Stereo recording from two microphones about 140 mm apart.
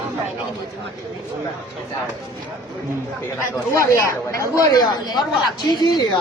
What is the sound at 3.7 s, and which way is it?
Speech, 20° left (ahead or behind).